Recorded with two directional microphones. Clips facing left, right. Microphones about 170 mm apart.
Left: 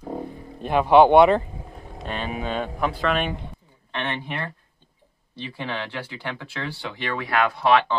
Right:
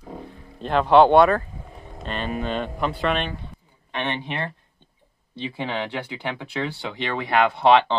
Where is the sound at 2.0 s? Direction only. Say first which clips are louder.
Right 1 dB; 5° left (ahead or behind).